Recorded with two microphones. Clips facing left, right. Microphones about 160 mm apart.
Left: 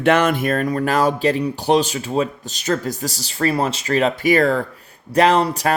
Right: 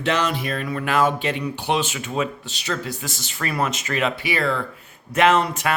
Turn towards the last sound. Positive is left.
turn(degrees=35)  # may be behind; listen again after turning